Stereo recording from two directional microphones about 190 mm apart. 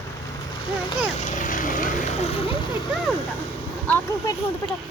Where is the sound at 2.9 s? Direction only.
Centre (ahead or behind).